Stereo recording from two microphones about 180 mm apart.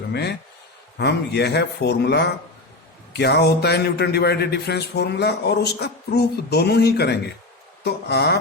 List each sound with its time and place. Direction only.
0.1 s a man's voice: 65° left (ahead or behind)